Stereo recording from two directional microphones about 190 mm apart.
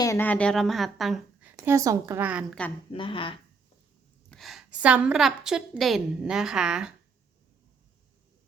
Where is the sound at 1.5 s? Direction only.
15° right (ahead or behind).